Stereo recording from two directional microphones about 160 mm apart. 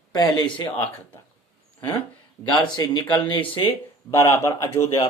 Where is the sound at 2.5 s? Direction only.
25° left (ahead or behind).